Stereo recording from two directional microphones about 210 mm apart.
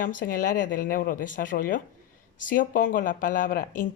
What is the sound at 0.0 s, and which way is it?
Speech, 40° left (ahead or behind).